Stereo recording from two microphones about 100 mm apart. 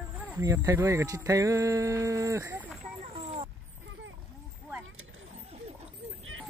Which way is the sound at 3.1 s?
85° right.